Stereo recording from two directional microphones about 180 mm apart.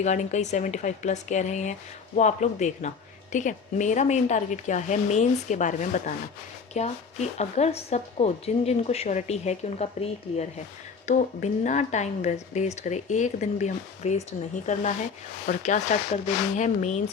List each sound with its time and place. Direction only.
0.0 s speech: 40° left (ahead or behind)